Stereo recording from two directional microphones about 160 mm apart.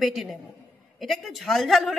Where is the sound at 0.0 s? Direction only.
Centre (ahead or behind).